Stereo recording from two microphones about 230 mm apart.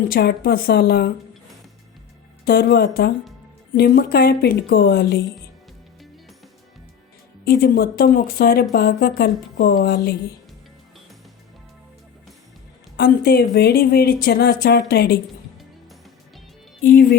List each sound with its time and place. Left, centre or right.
0.1 s speech: left
2.4 s speech: left
7.4 s speech: left
13.0 s speech: left
16.8 s speech: left